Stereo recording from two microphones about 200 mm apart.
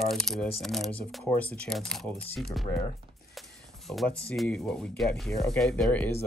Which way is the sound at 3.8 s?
Centre (ahead or behind).